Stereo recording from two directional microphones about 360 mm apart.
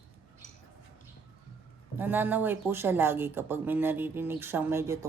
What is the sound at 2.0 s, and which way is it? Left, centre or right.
Speech, centre.